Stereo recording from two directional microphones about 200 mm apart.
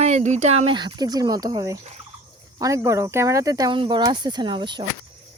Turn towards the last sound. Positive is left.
turn(degrees=-25)  # may be behind; listen again after turning